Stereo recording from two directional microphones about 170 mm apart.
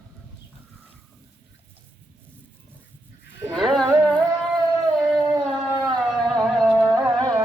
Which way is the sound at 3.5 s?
Centre (ahead or behind).